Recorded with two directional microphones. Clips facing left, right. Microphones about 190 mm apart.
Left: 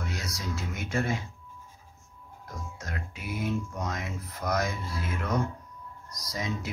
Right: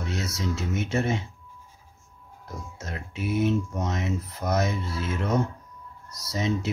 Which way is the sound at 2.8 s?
25° right (ahead or behind).